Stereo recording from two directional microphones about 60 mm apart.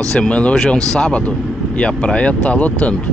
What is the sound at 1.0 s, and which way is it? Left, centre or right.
Speech, left.